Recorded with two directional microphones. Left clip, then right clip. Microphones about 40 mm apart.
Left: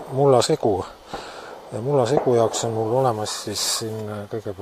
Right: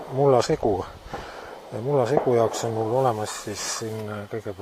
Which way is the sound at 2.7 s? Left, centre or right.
Left.